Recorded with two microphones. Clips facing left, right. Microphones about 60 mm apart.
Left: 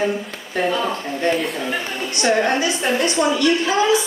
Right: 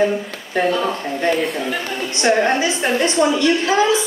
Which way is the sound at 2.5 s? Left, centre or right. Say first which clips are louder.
Right 2 dB; right.